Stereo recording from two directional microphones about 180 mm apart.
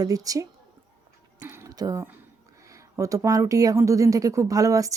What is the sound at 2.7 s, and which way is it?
Speech, 20° right (ahead or behind).